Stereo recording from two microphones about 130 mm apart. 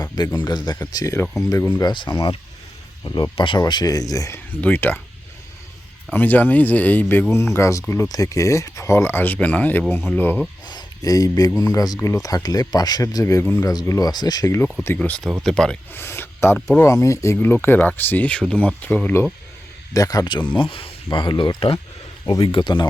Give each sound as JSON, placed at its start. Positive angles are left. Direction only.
{"t": 0.3, "sound": "speech", "side_deg": 35}
{"t": 1.8, "sound": "speech", "side_deg": 35}
{"t": 3.3, "sound": "speech", "side_deg": 40}
{"t": 4.6, "sound": "speech", "side_deg": 15}
{"t": 6.1, "sound": "speech", "side_deg": 15}
{"t": 10.7, "sound": "speech", "side_deg": 30}
{"t": 13.4, "sound": "speech", "side_deg": 10}
{"t": 13.7, "sound": "speech", "side_deg": 25}
{"t": 14.9, "sound": "speech", "side_deg": 10}
{"t": 15.9, "sound": "speech", "side_deg": 20}
{"t": 19.9, "sound": "speech", "side_deg": 25}
{"t": 20.6, "sound": "speech", "side_deg": 45}